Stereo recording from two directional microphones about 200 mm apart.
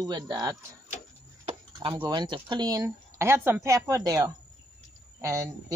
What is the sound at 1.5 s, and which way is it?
Chop, 25° right (ahead or behind).